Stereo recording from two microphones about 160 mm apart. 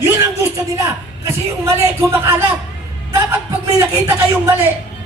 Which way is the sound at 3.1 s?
15° right (ahead or behind).